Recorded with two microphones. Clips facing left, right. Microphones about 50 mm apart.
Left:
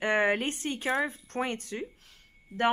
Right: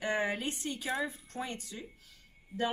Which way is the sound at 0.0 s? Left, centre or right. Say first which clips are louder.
Left 6 dB; left.